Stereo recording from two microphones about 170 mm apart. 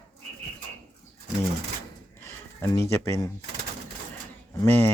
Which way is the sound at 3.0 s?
15° left (ahead or behind).